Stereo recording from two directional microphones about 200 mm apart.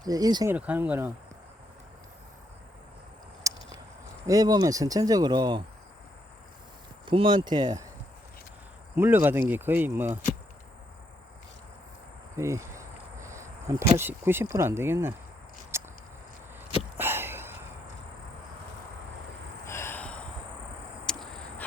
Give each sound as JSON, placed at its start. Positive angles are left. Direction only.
{"t": 0.0, "sound": "speech", "side_deg": -20}
{"t": 0.5, "sound": "speech", "side_deg": -5}
{"t": 3.4, "sound": "a sound", "side_deg": -15}
{"t": 4.3, "sound": "speech", "side_deg": -20}
{"t": 7.0, "sound": "speech", "side_deg": -25}
{"t": 9.0, "sound": "speech", "side_deg": -10}
{"t": 12.4, "sound": "cricket", "side_deg": -15}
{"t": 13.2, "sound": "speech", "side_deg": -15}
{"t": 15.7, "sound": "a sound", "side_deg": -15}
{"t": 17.0, "sound": "a sound", "side_deg": -10}
{"t": 19.6, "sound": "gasp", "side_deg": 10}
{"t": 21.1, "sound": "crow", "side_deg": 5}